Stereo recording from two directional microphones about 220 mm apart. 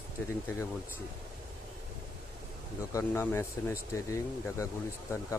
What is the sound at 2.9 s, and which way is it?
Speech, 10° left (ahead or behind).